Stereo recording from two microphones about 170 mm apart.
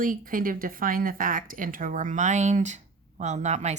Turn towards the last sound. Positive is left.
turn(degrees=-45)  # may be behind; listen again after turning